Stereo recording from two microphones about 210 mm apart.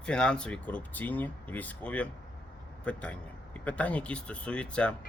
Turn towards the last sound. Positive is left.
turn(degrees=5)  # may be behind; listen again after turning